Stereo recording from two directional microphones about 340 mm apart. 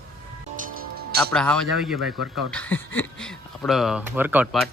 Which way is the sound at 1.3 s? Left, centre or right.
Centre.